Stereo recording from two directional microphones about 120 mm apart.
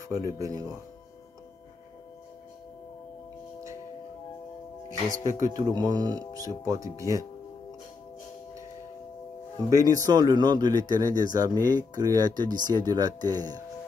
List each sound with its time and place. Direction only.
0.1 s speech: 30° right (ahead or behind)
5.1 s speech: 90° left
5.6 s speech: 30° right (ahead or behind)
9.7 s speech: 30° right (ahead or behind)